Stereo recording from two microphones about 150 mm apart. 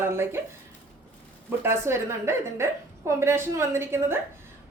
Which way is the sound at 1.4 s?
15° right (ahead or behind).